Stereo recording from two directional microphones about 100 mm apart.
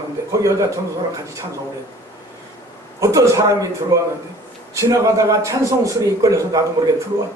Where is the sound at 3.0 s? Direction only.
30° right (ahead or behind).